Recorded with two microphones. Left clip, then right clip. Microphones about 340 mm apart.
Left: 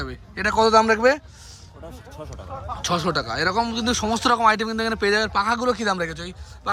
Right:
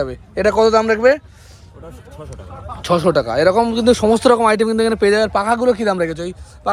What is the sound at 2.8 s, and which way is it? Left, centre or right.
Speech, centre.